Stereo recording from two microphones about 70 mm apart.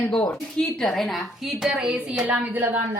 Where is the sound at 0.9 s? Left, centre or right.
Centre; by 2.8 s right.